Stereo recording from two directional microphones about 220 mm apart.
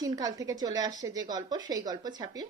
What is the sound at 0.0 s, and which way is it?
A woman's voice, 15° right (ahead or behind).